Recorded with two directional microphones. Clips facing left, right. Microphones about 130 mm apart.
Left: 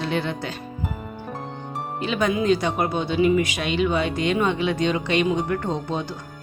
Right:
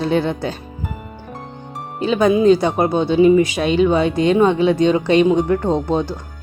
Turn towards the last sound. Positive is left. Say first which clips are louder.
# right 8 dB
turn(degrees=-40)  # may be behind; listen again after turning